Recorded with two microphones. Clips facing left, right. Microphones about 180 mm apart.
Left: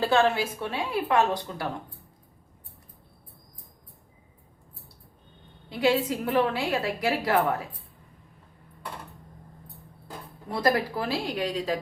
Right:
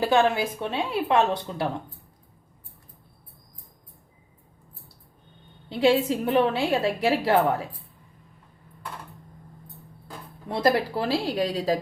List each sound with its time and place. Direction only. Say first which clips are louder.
0.0 s a woman's voice: right 1 dB; 15° right (ahead or behind)
5.6 s a woman's voice: right 3 dB; 25° right (ahead or behind)
10.5 s a woman's voice: right 2 dB; 25° right (ahead or behind)